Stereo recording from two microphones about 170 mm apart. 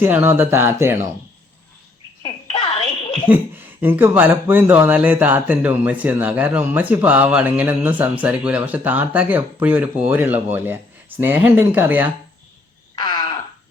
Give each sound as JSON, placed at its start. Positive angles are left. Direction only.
{"t": 0.0, "sound": "speech", "side_deg": -15}
{"t": 2.2, "sound": "a sound", "side_deg": 30}
{"t": 3.2, "sound": "speech", "side_deg": -10}